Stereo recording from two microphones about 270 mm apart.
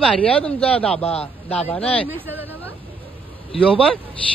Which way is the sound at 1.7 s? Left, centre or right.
Centre.